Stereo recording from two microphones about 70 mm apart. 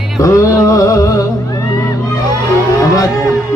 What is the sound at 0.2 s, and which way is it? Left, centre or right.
Music, left.